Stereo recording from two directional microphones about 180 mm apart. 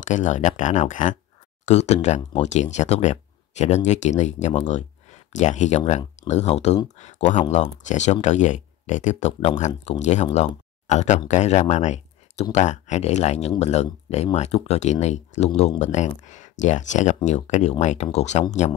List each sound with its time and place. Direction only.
0.0 s speech: 45° left (ahead or behind)